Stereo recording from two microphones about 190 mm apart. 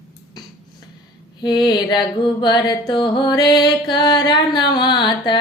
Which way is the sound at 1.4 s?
25° left (ahead or behind).